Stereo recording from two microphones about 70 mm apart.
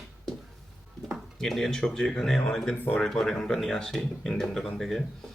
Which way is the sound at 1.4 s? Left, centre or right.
Centre.